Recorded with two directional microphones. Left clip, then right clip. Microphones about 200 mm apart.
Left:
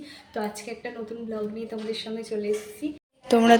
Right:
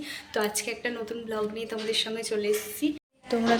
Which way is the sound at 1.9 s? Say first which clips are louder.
Right 4 dB; 5° left (ahead or behind).